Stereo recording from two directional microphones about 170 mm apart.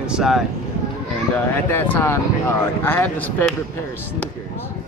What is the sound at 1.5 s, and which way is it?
Speech, 10° left (ahead or behind).